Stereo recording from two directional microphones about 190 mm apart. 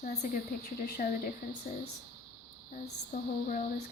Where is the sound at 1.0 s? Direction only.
45° left (ahead or behind).